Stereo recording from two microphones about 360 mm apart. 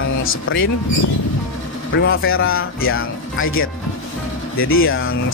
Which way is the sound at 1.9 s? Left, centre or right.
Left.